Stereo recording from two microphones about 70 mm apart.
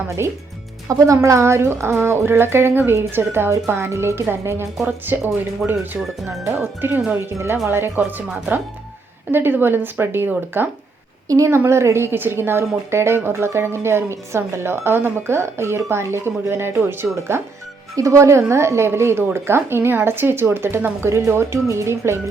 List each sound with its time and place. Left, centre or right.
0.2 s a woman's voice: right
0.9 s a woman's voice: right
6.0 s speech: centre
7.1 s a woman's voice: right
9.3 s a woman's voice: right
11.3 s a woman's voice: right
17.9 s a woman's voice: right